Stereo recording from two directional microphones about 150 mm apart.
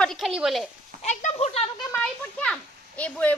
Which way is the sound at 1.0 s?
50° left (ahead or behind).